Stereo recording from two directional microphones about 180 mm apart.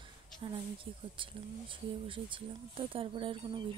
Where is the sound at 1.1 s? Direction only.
30° right (ahead or behind).